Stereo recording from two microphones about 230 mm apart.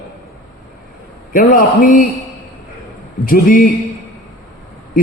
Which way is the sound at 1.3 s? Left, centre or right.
Left.